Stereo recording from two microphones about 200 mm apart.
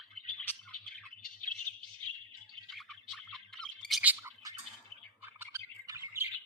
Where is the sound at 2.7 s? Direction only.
Centre (ahead or behind).